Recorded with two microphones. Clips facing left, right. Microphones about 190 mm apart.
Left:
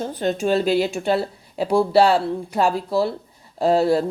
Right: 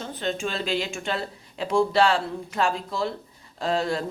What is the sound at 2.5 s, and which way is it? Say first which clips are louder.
Speech: left 6 dB; 35° left (ahead or behind).